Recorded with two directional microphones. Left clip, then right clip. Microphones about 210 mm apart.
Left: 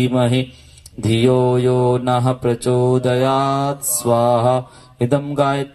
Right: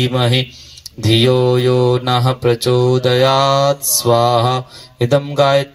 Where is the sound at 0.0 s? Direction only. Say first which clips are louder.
Right 2 dB; 35° right (ahead or behind).